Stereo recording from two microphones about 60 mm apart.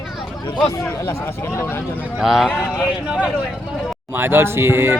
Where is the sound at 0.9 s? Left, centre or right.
Left.